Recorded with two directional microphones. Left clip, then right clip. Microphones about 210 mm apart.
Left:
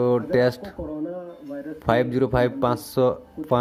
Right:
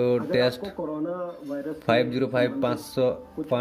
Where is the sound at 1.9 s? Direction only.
20° left (ahead or behind).